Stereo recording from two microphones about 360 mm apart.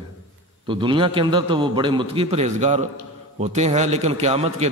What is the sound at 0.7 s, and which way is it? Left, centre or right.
A man's voice, centre.